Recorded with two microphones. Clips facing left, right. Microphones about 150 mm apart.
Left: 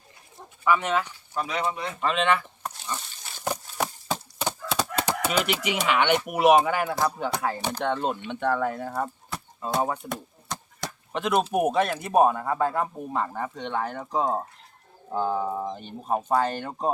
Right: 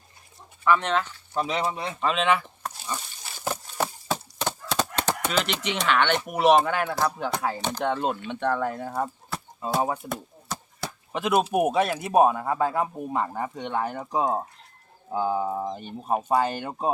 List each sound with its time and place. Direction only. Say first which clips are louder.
0.6 s speech: right 1 dB; 5° left (ahead or behind)
1.3 s speech: right 2 dB; 25° right (ahead or behind)
2.0 s speech: right 1 dB; 5° right (ahead or behind)
3.7 s a sound: right 2 dB; 5° left (ahead or behind)
4.4 s fowl: even; 10° left (ahead or behind)
5.2 s speech: left 1 dB; 10° left (ahead or behind)
7.9 s speech: right 1 dB; 5° right (ahead or behind)